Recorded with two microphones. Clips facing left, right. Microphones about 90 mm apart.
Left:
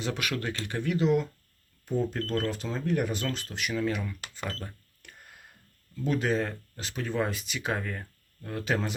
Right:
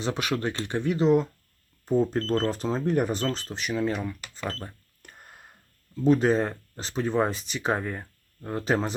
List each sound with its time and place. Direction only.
0.0 s speech: 25° right (ahead or behind)
4.4 s cash register: 35° right (ahead or behind)
6.1 s speech: 35° right (ahead or behind)